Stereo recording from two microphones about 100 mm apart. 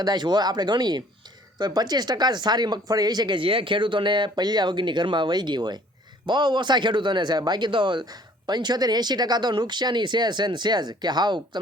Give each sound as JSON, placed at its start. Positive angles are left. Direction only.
{"t": 0.0, "sound": "a man's voice", "side_deg": -45}